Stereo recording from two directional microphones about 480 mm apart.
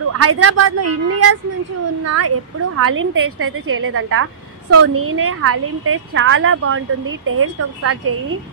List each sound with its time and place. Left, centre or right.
0.2 s a woman's voice: right